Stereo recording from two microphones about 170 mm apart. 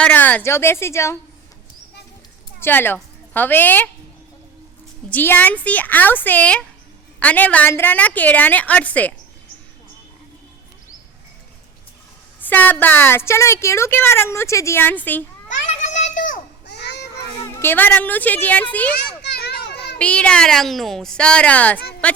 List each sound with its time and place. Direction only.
0.0 s a woman's voice: 10° left (ahead or behind)
2.6 s a woman's voice: 10° left (ahead or behind)
5.0 s a woman's voice: 10° left (ahead or behind)
12.4 s a woman's voice: 10° left (ahead or behind)
15.4 s children playing: 45° left (ahead or behind)
16.6 s children playing: 80° left
17.6 s a woman's voice: 10° left (ahead or behind)
19.2 s children playing: 75° left (ahead or behind)
20.0 s a woman's voice: 5° left (ahead or behind)